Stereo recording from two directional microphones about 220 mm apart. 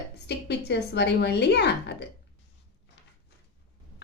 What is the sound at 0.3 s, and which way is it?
A woman's voice, 50° left (ahead or behind).